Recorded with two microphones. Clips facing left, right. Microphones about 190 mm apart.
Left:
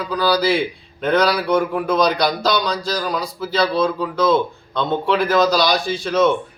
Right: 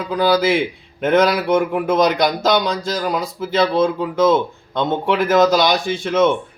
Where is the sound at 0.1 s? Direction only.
20° right (ahead or behind).